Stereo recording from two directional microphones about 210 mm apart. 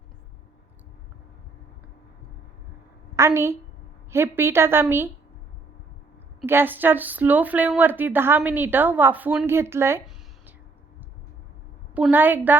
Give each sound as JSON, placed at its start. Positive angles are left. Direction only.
{"t": 3.2, "sound": "a woman's voice", "side_deg": -15}
{"t": 6.4, "sound": "a woman's voice", "side_deg": -10}
{"t": 11.9, "sound": "a woman's voice", "side_deg": -10}